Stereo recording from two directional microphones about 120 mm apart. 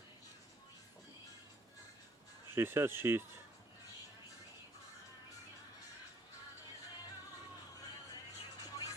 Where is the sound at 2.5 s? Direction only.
20° right (ahead or behind).